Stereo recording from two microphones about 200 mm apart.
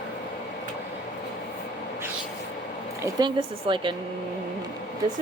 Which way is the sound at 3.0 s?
25° right (ahead or behind).